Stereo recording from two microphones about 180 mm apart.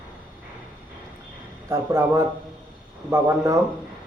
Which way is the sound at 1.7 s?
15° right (ahead or behind).